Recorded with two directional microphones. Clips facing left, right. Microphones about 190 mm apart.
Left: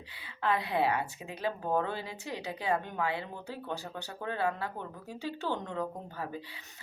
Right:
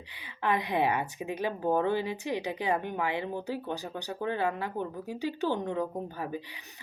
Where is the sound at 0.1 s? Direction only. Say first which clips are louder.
Right 2 dB; 15° right (ahead or behind).